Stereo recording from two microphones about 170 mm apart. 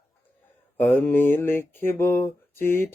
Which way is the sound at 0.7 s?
10° left (ahead or behind).